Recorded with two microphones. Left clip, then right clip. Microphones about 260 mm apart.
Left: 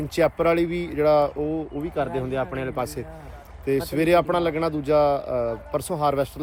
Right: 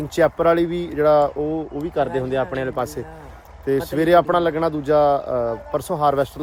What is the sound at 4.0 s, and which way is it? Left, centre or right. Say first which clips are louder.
Speech: right 5 dB; centre.